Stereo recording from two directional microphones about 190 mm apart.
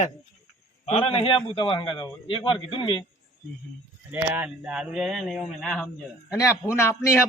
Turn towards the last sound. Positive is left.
turn(degrees=15)  # may be behind; listen again after turning